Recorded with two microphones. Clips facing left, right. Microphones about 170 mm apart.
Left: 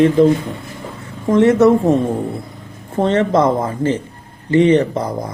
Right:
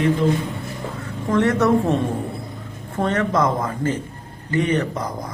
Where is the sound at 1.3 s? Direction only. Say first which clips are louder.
Left 7 dB; 20° left (ahead or behind).